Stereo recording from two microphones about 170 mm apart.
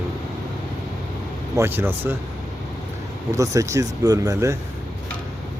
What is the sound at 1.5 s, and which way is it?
Speech, 15° right (ahead or behind).